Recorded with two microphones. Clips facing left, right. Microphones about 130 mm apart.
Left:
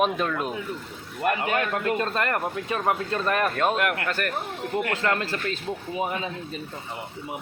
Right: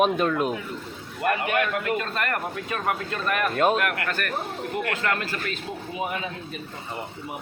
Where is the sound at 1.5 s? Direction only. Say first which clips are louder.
Even; 25° left (ahead or behind).